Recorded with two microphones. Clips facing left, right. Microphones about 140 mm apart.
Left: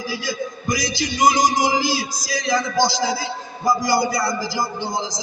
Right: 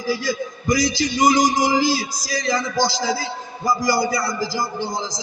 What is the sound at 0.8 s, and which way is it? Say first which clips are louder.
A man's voice: right 1 dB; 65° left (ahead or behind).